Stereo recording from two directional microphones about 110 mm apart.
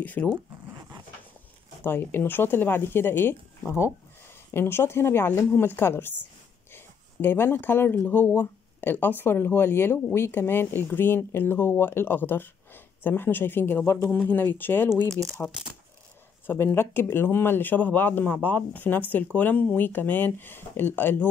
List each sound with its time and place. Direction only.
0.0 s speech: 15° left (ahead or behind)
1.8 s speech: 20° left (ahead or behind)
16.4 s speech: 20° left (ahead or behind)